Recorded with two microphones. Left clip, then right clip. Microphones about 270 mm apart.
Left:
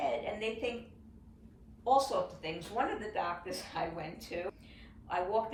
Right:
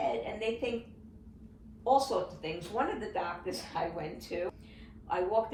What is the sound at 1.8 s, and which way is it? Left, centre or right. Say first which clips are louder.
Speech: right 1 dB; centre.